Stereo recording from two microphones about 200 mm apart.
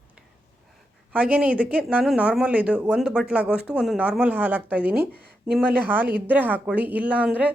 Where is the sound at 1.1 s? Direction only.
5° right (ahead or behind).